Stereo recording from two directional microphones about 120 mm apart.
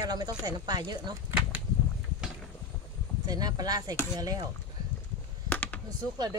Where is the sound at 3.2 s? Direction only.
30° right (ahead or behind).